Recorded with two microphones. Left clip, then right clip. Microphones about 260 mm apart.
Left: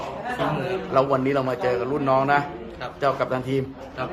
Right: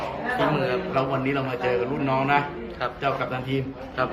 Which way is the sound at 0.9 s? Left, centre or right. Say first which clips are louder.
Left 8 dB; left.